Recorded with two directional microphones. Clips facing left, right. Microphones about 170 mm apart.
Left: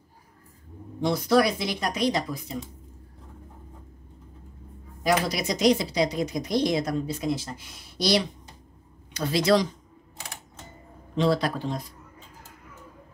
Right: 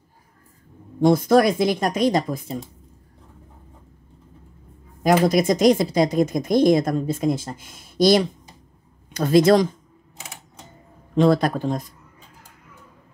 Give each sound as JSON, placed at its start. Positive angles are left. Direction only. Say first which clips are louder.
{"t": 1.0, "sound": "speech", "louder": "right 6 dB", "side_deg": -50}
{"t": 5.0, "sound": "speech", "louder": "right 8 dB", "side_deg": -50}
{"t": 11.1, "sound": "speech", "louder": "right 6 dB", "side_deg": -50}